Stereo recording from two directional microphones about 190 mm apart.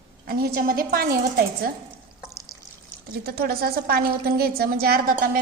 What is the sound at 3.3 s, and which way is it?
A woman's voice, 55° right (ahead or behind).